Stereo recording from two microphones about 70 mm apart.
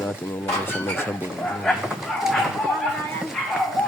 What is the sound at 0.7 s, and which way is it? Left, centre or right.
Speech, left.